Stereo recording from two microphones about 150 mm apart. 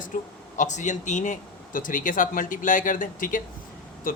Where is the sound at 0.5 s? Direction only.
55° left (ahead or behind).